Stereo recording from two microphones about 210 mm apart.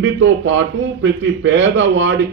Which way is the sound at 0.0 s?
65° right (ahead or behind).